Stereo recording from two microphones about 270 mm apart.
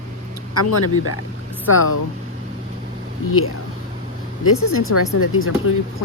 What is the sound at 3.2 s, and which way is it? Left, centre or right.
Speech, left.